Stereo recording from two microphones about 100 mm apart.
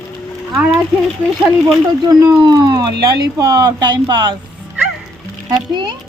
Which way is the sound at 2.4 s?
50° right (ahead or behind).